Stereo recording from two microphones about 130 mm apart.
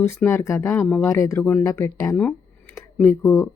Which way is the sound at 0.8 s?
10° left (ahead or behind).